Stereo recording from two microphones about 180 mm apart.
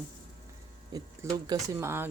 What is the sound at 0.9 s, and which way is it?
Speech, 20° right (ahead or behind).